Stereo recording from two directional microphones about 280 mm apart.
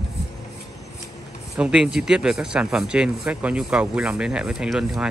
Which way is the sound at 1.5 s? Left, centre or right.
Centre.